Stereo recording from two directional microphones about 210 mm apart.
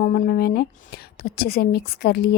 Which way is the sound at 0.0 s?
40° left (ahead or behind).